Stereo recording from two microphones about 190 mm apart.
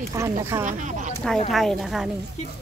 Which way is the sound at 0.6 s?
40° right (ahead or behind).